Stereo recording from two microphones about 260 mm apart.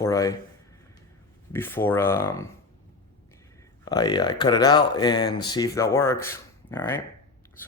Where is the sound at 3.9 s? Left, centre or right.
Centre.